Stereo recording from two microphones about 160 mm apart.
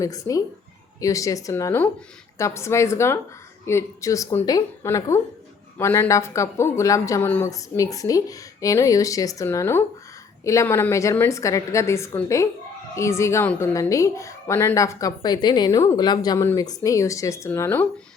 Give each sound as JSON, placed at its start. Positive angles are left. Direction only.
{"t": 0.0, "sound": "a woman's voice", "side_deg": 20}